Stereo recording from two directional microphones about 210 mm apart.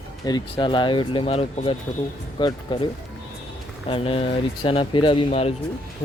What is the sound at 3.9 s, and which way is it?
Speech, 25° left (ahead or behind).